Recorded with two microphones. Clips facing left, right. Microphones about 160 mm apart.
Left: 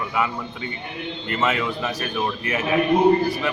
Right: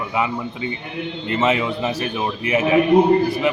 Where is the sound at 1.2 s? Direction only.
25° right (ahead or behind).